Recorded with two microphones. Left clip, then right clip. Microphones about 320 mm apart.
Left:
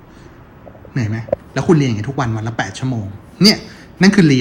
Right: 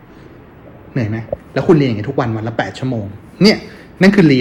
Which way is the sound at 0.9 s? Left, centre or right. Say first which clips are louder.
Left 1 dB; centre.